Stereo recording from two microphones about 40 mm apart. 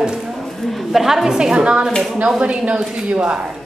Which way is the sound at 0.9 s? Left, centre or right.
Centre.